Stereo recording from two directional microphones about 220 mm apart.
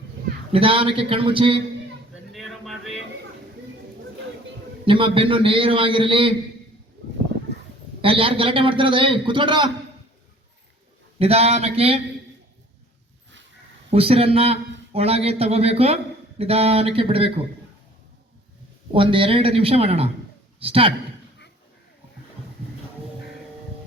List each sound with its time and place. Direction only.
0.5 s a man's voice: 25° right (ahead or behind)
2.3 s music: centre (ahead or behind)
4.9 s a man's voice: 25° right (ahead or behind)
8.0 s a man's voice: 25° right (ahead or behind)
11.2 s a man's voice: 25° right (ahead or behind)
13.9 s a man's voice: 25° right (ahead or behind)
19.1 s a man's voice: 25° right (ahead or behind)